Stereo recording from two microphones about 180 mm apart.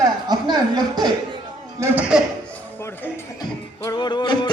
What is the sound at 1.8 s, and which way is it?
Speech, 10° right (ahead or behind).